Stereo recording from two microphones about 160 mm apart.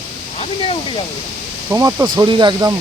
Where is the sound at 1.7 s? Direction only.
20° right (ahead or behind).